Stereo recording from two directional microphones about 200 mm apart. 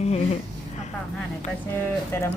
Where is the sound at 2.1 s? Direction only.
10° left (ahead or behind).